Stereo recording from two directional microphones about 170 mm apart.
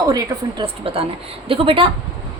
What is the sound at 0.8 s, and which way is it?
A woman's voice, 35° right (ahead or behind).